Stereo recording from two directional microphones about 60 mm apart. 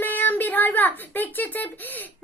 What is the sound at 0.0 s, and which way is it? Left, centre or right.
A child's voice, left.